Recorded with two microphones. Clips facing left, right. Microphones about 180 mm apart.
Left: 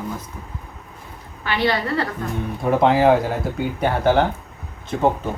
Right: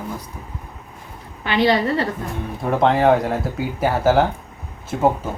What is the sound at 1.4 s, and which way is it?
Speech, 20° right (ahead or behind).